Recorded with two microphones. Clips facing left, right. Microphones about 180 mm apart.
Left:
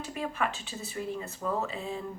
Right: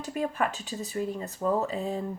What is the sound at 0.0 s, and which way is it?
Speech, 45° right (ahead or behind).